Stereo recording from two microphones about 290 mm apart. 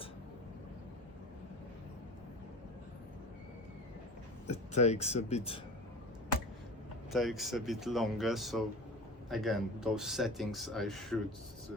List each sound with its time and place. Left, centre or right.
4.4 s speech: left
7.1 s speech: centre